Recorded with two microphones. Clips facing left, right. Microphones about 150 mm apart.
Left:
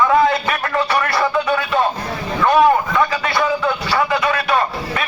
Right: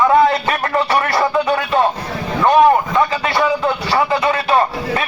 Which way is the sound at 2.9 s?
30° right (ahead or behind).